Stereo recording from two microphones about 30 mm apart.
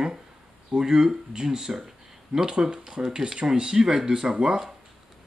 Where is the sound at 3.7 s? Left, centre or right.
Centre.